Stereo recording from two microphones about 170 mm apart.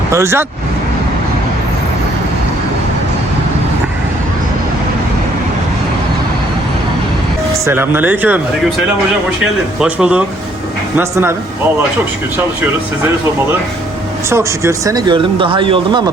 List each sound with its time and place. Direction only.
0.1 s speech: 15° right (ahead or behind)
7.6 s speech: 10° right (ahead or behind)
9.8 s speech: 5° right (ahead or behind)
14.3 s speech: 15° right (ahead or behind)